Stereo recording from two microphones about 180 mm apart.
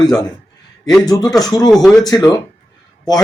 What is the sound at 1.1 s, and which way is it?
A man's voice, 20° left (ahead or behind).